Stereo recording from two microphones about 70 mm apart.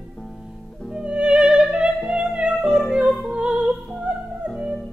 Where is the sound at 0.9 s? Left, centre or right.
Centre.